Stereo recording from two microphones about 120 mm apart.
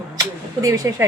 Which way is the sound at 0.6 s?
25° right (ahead or behind).